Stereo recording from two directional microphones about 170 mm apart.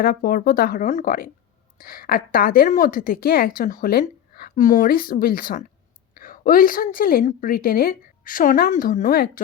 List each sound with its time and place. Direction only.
0.0 s a woman's voice: 60° left (ahead or behind)